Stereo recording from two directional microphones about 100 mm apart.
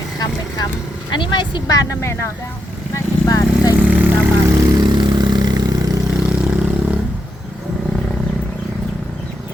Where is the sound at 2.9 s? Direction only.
35° left (ahead or behind).